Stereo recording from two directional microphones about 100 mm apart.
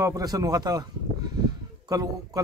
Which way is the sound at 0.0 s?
35° right (ahead or behind).